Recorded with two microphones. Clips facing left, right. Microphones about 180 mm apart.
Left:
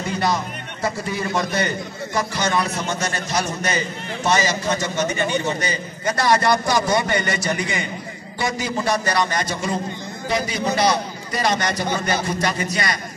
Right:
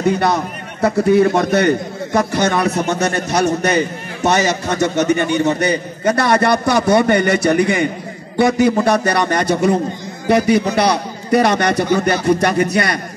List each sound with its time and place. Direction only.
0.0 s a man's voice: 60° right (ahead or behind)